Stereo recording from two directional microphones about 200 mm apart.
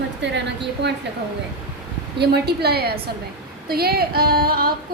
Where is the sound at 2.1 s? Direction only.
55° right (ahead or behind).